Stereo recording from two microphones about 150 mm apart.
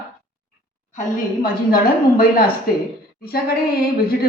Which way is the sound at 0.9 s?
70° left (ahead or behind).